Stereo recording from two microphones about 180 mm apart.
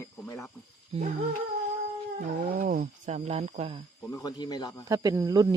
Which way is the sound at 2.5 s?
50° right (ahead or behind).